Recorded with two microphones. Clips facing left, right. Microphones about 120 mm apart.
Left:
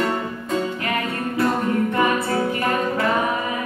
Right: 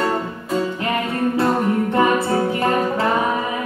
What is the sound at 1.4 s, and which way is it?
Music, 30° right (ahead or behind).